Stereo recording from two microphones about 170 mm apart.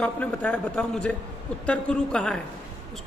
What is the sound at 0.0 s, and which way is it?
Speech, 10° left (ahead or behind).